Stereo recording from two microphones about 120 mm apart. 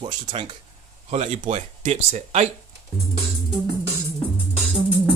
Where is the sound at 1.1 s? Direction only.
60° right (ahead or behind).